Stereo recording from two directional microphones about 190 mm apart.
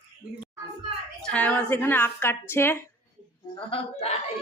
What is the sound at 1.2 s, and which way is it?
Speech, 5° left (ahead or behind).